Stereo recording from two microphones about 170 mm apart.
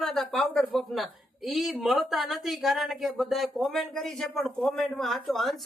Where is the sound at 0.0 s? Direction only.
5° left (ahead or behind).